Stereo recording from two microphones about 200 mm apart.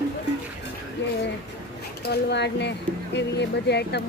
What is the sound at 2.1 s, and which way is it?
Speech, 60° left (ahead or behind).